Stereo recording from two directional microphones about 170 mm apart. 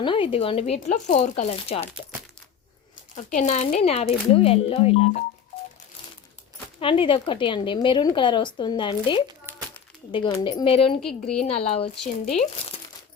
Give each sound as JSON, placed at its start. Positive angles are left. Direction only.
{"t": 0.0, "sound": "speech", "side_deg": 30}
{"t": 3.2, "sound": "speech", "side_deg": 45}
{"t": 6.7, "sound": "speech", "side_deg": 30}
{"t": 9.5, "sound": "a sound", "side_deg": -15}
{"t": 10.1, "sound": "speech", "side_deg": 30}
{"t": 11.0, "sound": "a woman's voice", "side_deg": 5}
{"t": 11.4, "sound": "speech", "side_deg": 40}